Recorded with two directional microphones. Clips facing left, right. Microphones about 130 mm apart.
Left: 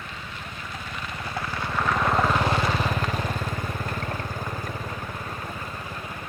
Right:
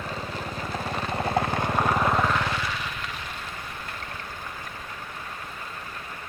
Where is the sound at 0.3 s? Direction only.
35° right (ahead or behind).